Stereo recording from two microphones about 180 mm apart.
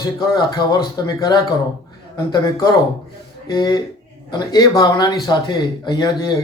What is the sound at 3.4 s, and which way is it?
A man's voice, 20° left (ahead or behind).